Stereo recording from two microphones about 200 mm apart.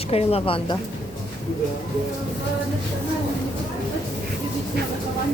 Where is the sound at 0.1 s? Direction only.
30° left (ahead or behind).